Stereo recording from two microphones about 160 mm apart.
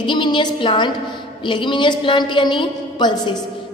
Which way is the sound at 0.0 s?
30° left (ahead or behind).